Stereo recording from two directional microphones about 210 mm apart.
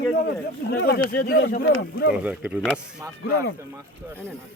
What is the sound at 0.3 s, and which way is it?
Speech, 50° left (ahead or behind).